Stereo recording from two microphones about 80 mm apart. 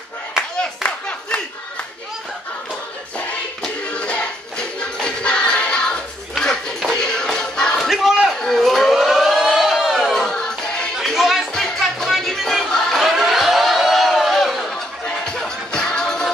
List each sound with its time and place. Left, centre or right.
0.4 s clapping: centre
3.6 s music: centre
7.9 s a sound: centre
8.4 s siren: centre
11.1 s music: centre